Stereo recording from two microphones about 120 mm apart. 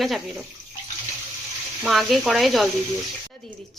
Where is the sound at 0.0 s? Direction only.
Centre (ahead or behind).